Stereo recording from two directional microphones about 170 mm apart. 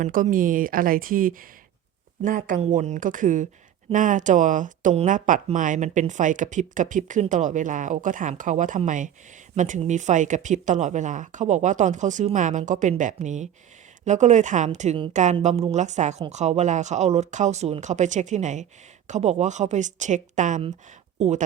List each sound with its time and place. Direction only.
0.0 s speech: 50° right (ahead or behind)